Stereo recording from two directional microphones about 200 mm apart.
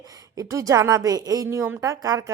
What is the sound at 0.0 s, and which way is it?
A woman's voice, 15° right (ahead or behind).